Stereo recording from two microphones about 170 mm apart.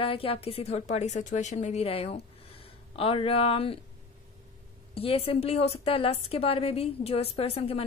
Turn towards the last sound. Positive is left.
turn(degrees=35)  # may be behind; listen again after turning